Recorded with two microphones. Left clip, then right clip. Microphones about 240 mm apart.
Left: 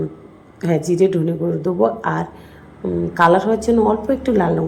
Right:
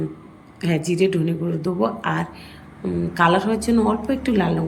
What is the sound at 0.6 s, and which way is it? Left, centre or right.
Speech, centre.